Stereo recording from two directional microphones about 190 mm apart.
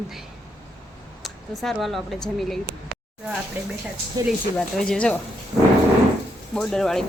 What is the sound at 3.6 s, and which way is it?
Speech, 10° right (ahead or behind).